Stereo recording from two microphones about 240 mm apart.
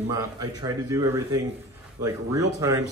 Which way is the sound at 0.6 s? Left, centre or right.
Centre.